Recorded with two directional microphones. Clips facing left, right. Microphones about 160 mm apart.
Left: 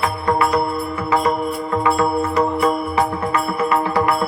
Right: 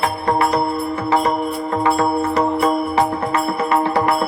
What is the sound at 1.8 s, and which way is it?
Music, 30° right (ahead or behind).